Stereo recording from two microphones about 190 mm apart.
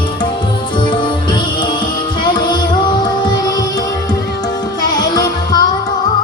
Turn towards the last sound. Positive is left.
turn(degrees=20)  # may be behind; listen again after turning